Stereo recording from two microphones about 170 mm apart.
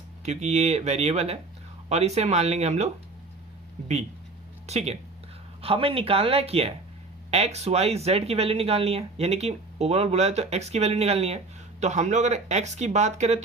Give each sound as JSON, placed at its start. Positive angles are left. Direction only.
{"t": 0.3, "sound": "speech", "side_deg": -40}
{"t": 4.6, "sound": "speech", "side_deg": -40}